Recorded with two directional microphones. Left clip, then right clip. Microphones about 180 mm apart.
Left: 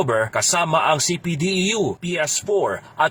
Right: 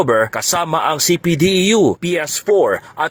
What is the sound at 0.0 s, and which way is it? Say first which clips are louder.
Speech: right 5 dB; 40° right (ahead or behind).